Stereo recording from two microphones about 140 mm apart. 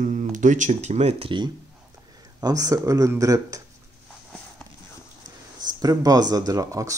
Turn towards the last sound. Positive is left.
turn(degrees=-25)  # may be behind; listen again after turning